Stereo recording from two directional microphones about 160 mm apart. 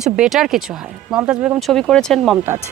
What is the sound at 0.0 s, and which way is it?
Speech, 5° right (ahead or behind).